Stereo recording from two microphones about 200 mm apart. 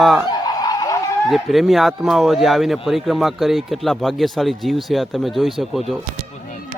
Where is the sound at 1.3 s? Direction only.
Centre (ahead or behind).